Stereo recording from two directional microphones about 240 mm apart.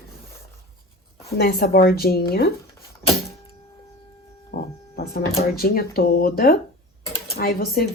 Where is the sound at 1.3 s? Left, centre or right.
Left.